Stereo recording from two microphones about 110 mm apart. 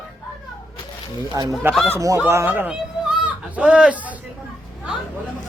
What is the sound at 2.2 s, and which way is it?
Speech, 20° right (ahead or behind).